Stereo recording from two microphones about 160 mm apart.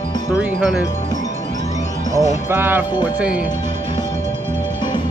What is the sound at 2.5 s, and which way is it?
Music, 15° right (ahead or behind).